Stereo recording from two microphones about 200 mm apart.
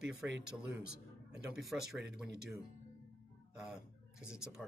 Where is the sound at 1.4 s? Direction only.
Centre (ahead or behind).